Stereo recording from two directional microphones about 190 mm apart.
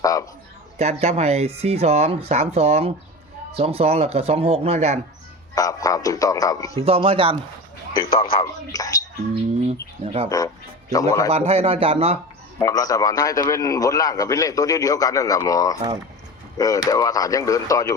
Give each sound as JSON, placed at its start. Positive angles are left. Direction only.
{"t": 0.0, "sound": "speech", "side_deg": 15}
{"t": 0.8, "sound": "speech", "side_deg": -35}
{"t": 5.5, "sound": "a man's voice", "side_deg": 20}
{"t": 6.7, "sound": "speech", "side_deg": -30}
{"t": 8.2, "sound": "a man's voice", "side_deg": 25}
{"t": 10.0, "sound": "speech", "side_deg": -30}
{"t": 10.2, "sound": "speech", "side_deg": 20}
{"t": 11.3, "sound": "speech", "side_deg": -35}
{"t": 12.5, "sound": "a man's voice", "side_deg": 15}